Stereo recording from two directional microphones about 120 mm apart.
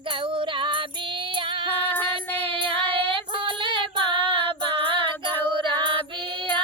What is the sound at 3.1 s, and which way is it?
Female singing, 45° right (ahead or behind).